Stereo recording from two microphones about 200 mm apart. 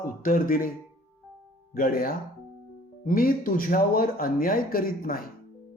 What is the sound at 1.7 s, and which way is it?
Speech, 45° left (ahead or behind).